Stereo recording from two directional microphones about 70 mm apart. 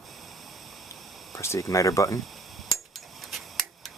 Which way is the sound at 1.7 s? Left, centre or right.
Left.